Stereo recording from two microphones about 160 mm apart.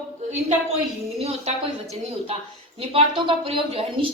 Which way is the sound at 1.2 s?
40° right (ahead or behind).